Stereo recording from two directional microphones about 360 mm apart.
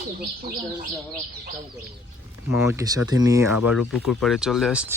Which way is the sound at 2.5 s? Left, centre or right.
Centre.